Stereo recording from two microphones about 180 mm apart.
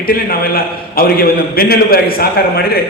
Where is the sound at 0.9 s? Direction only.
55° left (ahead or behind).